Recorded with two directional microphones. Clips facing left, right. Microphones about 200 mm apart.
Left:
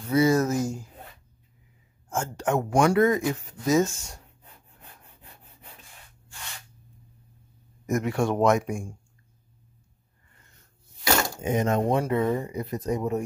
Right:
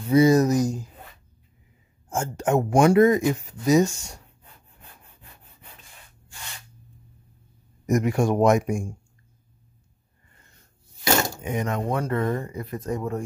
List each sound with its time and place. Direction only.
0.0 s speech: 15° right (ahead or behind)
2.0 s speech: 15° right (ahead or behind)
7.8 s speech: 15° right (ahead or behind)
11.4 s speech: 25° left (ahead or behind)
12.1 s speech: 10° left (ahead or behind)